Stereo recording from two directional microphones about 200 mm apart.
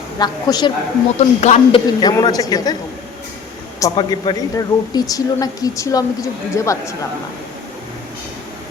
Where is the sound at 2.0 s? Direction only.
20° left (ahead or behind).